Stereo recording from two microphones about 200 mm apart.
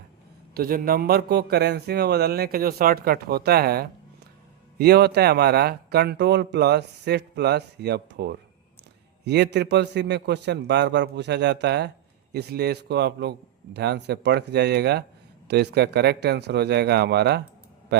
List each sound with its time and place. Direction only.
0.5 s a man's voice: 45° right (ahead or behind)